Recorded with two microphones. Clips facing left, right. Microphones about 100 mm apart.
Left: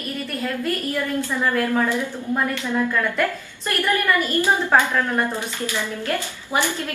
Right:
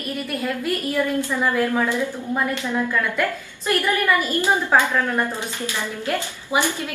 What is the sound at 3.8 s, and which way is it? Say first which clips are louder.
A woman's voice: even; 15° right (ahead or behind).